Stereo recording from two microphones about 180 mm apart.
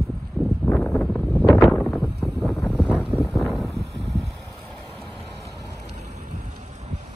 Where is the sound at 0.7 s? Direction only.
10° left (ahead or behind).